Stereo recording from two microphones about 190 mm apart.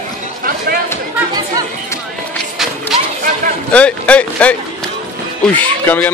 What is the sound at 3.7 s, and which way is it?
A man's voice, 5° left (ahead or behind).